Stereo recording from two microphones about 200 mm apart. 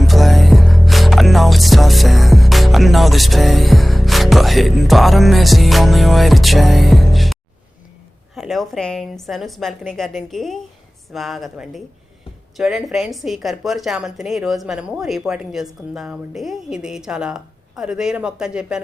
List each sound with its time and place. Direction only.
0.0 s music: centre (ahead or behind)
8.4 s a woman's voice: centre (ahead or behind)